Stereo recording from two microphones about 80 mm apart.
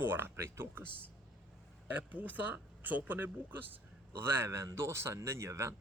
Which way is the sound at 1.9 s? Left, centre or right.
Right.